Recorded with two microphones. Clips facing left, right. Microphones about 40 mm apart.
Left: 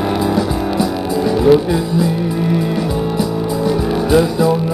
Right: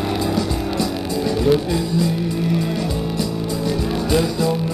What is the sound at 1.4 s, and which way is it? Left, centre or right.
Music, centre.